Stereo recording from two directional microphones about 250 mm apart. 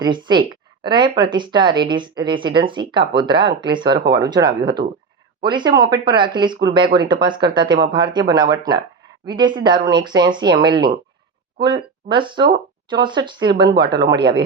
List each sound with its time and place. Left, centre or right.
0.0 s speech: centre
3.8 s speech: right
4.1 s speech: centre